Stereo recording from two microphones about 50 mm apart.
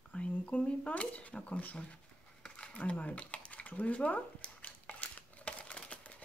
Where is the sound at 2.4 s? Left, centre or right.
Centre.